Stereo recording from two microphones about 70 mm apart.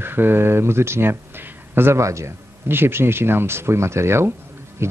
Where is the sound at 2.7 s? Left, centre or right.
Right.